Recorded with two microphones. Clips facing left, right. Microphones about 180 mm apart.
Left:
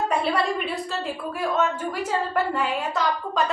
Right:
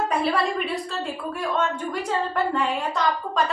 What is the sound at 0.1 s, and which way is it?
A woman's voice, centre (ahead or behind).